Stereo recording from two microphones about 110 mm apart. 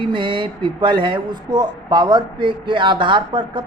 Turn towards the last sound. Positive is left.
turn(degrees=-45)  # may be behind; listen again after turning